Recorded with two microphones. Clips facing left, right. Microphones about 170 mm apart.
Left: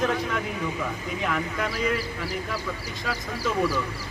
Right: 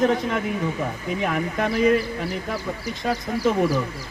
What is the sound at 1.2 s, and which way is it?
Speech, 45° right (ahead or behind).